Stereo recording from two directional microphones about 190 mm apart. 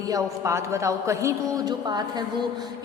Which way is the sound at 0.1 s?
15° right (ahead or behind).